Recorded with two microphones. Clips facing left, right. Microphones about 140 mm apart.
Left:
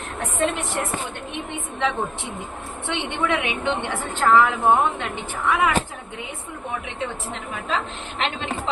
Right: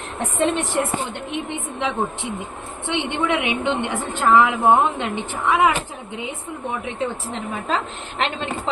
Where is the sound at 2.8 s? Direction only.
20° right (ahead or behind).